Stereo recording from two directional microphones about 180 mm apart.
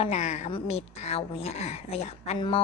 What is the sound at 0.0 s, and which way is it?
A woman's voice, 40° left (ahead or behind).